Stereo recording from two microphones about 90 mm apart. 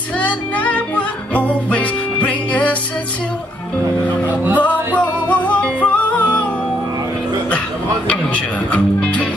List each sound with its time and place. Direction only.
0.2 s music: 15° left (ahead or behind)
4.3 s music: 20° right (ahead or behind)
4.6 s music: 15° left (ahead or behind)
8.1 s a man's voice: 15° left (ahead or behind)